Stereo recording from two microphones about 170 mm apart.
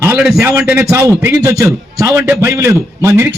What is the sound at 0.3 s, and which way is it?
A man's voice, 15° right (ahead or behind).